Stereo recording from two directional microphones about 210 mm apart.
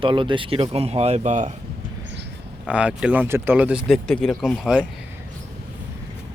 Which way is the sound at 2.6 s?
5° right (ahead or behind).